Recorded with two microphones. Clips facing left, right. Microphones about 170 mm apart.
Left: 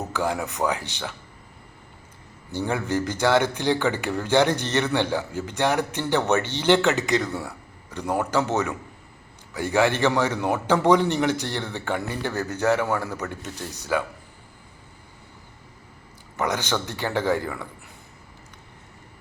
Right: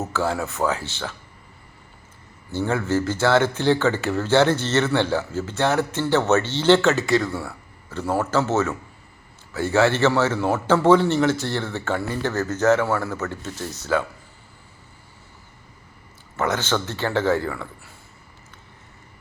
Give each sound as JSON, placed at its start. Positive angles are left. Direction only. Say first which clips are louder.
{"t": 0.1, "sound": "speech", "louder": "right 2 dB", "side_deg": 15}
{"t": 2.5, "sound": "speech", "louder": "right 3 dB", "side_deg": 15}
{"t": 16.4, "sound": "speech", "louder": "right 2 dB", "side_deg": 15}